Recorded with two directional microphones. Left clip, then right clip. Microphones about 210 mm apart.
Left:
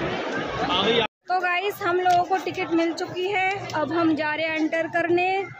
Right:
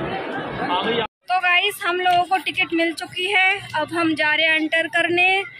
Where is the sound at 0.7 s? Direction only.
50° left (ahead or behind).